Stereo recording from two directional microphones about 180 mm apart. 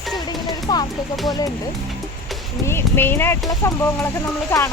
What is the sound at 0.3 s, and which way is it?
Music, 25° left (ahead or behind).